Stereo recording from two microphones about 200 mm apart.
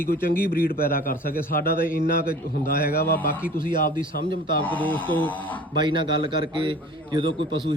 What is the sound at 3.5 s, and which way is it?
Speech, 45° left (ahead or behind).